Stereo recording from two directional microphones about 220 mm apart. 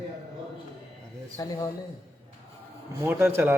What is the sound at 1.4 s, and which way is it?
Speech, 15° left (ahead or behind).